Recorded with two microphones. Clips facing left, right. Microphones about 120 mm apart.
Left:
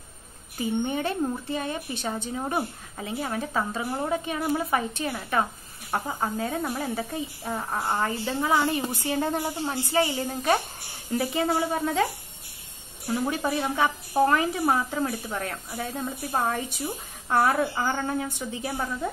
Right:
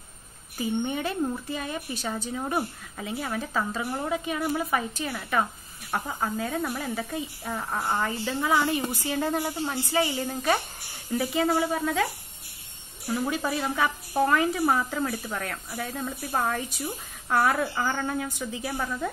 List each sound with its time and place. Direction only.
0.6 s a woman's voice: 25° left (ahead or behind)
8.0 s a woman's voice: 35° left (ahead or behind)
13.3 s a woman's voice: 20° left (ahead or behind)
18.4 s a woman's voice: 20° left (ahead or behind)